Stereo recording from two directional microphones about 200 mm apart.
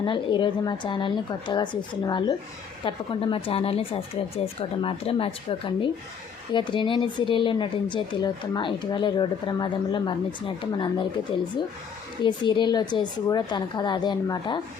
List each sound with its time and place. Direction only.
0.0 s speech: 25° left (ahead or behind)